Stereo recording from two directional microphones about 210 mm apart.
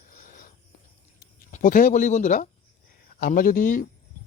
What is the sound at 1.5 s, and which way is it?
Speech, 40° left (ahead or behind).